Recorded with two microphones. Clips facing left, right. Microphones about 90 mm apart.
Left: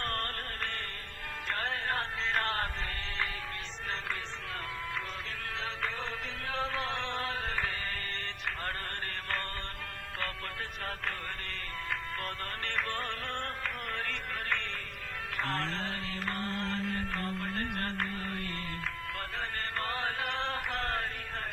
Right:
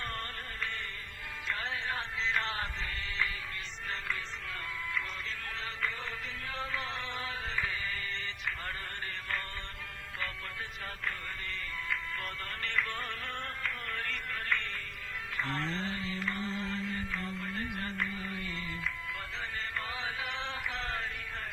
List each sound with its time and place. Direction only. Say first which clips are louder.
0.0 s music: left 4 dB; 60° left (ahead or behind)
6.5 s music: left 4 dB; 65° left (ahead or behind)
12.6 s music: right 1 dB; 60° left (ahead or behind)
14.0 s music: left 1 dB; 70° left (ahead or behind)
15.4 s mantra: left 1 dB; 50° left (ahead or behind)
19.8 s a sound: left 4 dB; 55° left (ahead or behind)